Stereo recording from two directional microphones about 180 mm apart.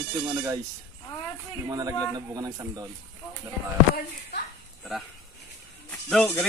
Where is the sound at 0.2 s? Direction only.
15° right (ahead or behind).